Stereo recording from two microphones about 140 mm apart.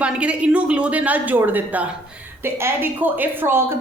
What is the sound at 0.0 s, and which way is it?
A woman's voice, 10° right (ahead or behind).